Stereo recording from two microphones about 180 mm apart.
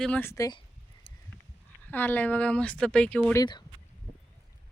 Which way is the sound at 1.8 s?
10° left (ahead or behind).